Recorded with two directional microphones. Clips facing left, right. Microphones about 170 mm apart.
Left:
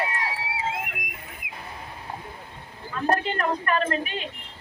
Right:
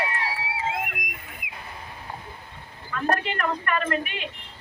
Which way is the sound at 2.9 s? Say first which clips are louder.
Left 1 dB; 30° left (ahead or behind).